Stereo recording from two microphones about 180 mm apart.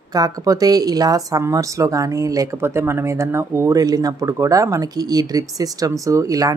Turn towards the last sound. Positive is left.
turn(degrees=-20)  # may be behind; listen again after turning